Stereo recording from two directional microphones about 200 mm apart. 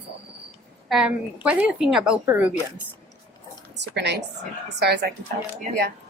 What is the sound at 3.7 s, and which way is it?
A woman's voice, 60° right (ahead or behind).